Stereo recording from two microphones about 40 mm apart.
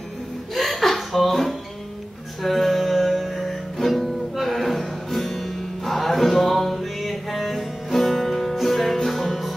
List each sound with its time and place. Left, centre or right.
0.6 s chuckle: centre
2.4 s music: centre